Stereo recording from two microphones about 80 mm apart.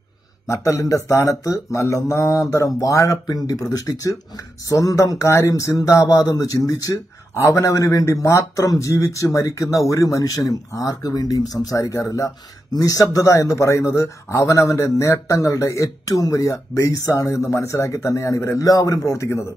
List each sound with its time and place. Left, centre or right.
0.5 s a man's voice: left